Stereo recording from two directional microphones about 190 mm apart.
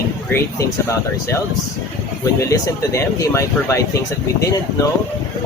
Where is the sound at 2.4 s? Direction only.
15° left (ahead or behind).